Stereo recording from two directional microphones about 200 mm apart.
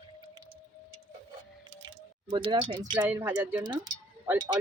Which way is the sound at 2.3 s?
25° right (ahead or behind).